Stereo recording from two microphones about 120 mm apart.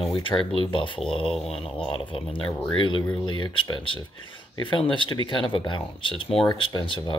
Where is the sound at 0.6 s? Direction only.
45° left (ahead or behind).